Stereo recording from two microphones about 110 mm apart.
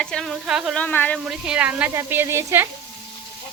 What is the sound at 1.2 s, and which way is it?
A woman's voice, 10° right (ahead or behind).